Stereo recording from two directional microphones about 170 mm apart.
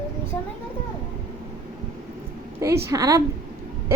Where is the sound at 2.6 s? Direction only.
15° right (ahead or behind).